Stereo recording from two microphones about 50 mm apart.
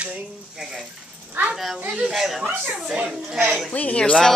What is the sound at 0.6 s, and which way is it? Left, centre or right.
Speech, centre.